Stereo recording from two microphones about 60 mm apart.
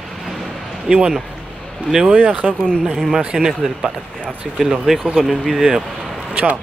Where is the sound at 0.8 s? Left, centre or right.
Centre.